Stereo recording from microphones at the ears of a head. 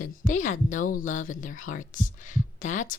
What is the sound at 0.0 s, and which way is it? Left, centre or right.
A woman's voice, left.